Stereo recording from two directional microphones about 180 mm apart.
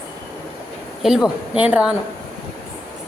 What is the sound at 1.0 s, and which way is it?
Speech, 5° right (ahead or behind).